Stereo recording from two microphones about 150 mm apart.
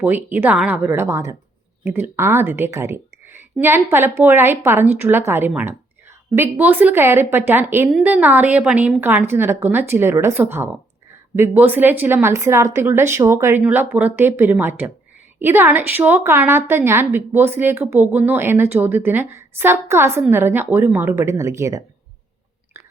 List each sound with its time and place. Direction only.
0.0 s a woman's voice: 10° right (ahead or behind)